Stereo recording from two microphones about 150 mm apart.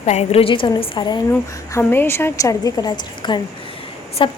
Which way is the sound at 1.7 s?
15° left (ahead or behind).